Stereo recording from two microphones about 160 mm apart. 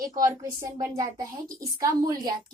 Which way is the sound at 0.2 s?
20° right (ahead or behind).